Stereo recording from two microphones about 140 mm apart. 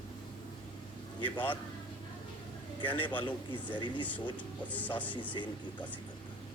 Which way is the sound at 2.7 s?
35° left (ahead or behind).